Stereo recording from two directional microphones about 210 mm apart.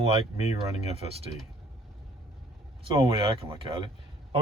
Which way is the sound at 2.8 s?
25° right (ahead or behind).